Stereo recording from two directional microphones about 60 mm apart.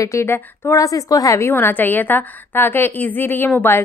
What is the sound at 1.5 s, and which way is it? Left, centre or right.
A woman's voice, left.